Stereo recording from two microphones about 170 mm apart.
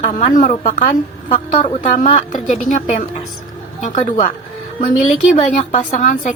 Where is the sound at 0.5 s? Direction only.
35° left (ahead or behind).